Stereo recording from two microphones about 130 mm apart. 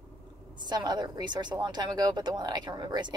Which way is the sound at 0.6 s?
35° right (ahead or behind).